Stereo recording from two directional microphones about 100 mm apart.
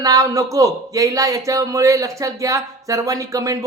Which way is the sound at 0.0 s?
35° right (ahead or behind).